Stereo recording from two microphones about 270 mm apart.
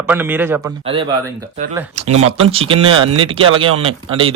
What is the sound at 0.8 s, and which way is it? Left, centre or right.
Speech, centre.